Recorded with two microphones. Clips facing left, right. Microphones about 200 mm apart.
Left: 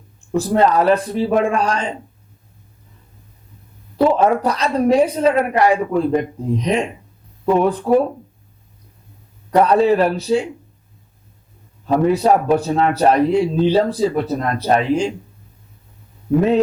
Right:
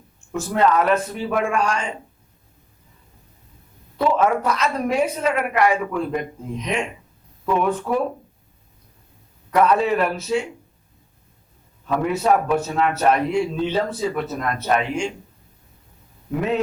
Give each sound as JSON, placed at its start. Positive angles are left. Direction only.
{"t": 0.3, "sound": "a man's voice", "side_deg": 35}
{"t": 3.9, "sound": "a man's voice", "side_deg": 35}
{"t": 9.5, "sound": "a man's voice", "side_deg": 35}
{"t": 11.9, "sound": "a man's voice", "side_deg": 35}